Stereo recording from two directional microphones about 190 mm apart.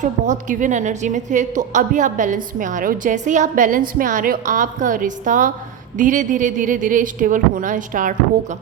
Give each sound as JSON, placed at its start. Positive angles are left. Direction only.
{"t": 0.0, "sound": "a woman's voice", "side_deg": -40}